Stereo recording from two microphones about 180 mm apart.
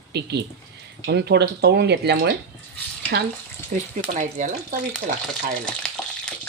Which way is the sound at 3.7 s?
45° right (ahead or behind).